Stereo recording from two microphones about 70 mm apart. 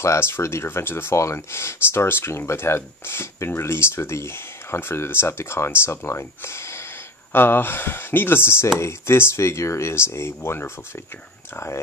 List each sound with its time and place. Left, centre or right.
0.0 s speech: left